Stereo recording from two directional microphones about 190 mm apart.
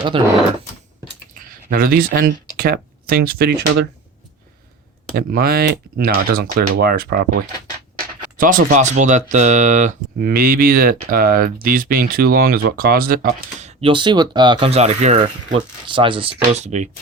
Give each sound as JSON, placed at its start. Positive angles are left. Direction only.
{"t": 0.1, "sound": "speech", "side_deg": -30}
{"t": 1.3, "sound": "speech", "side_deg": -50}
{"t": 5.1, "sound": "speech", "side_deg": -50}
{"t": 13.7, "sound": "speech", "side_deg": -25}
{"t": 15.9, "sound": "speech", "side_deg": -25}